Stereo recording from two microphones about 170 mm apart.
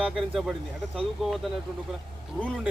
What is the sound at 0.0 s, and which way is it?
Speech, centre (ahead or behind).